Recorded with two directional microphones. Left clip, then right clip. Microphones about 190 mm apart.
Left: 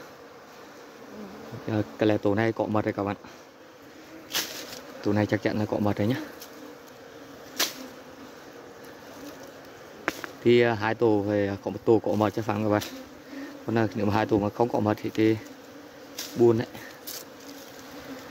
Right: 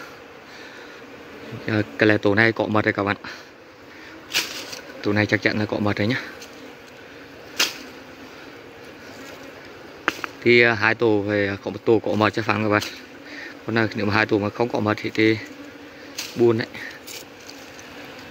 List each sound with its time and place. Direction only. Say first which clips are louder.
1.7 s speech: right 6 dB; 10° left (ahead or behind)
5.0 s speech: right 6 dB; 15° left (ahead or behind)
10.4 s speech: right 6 dB; 20° left (ahead or behind)